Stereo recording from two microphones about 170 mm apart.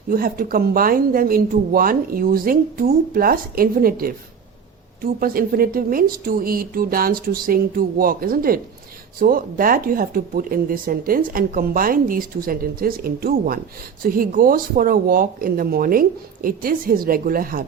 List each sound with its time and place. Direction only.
0.1 s speech: 60° right (ahead or behind)
5.2 s speech: 60° right (ahead or behind)